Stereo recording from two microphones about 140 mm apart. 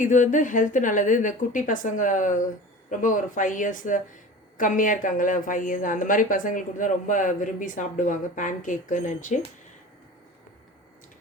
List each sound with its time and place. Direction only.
0.0 s a woman's voice: 65° left (ahead or behind)